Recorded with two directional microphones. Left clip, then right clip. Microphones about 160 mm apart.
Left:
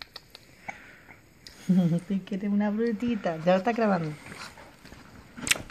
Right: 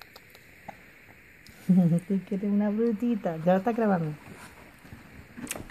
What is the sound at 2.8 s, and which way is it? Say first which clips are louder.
Speech: right 1 dB; 70° right (ahead or behind).